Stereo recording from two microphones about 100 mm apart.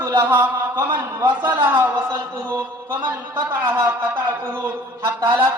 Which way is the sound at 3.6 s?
25° right (ahead or behind).